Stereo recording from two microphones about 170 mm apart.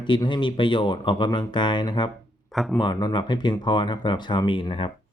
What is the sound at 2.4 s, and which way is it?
Speech, centre (ahead or behind).